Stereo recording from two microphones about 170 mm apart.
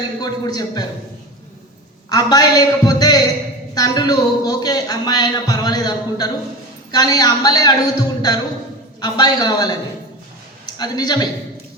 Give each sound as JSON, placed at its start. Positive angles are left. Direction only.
{"t": 0.2, "sound": "speech", "side_deg": 25}
{"t": 2.0, "sound": "a woman's voice", "side_deg": 25}